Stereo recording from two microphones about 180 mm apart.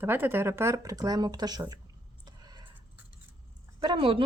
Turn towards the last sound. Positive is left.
turn(degrees=-30)  # may be behind; listen again after turning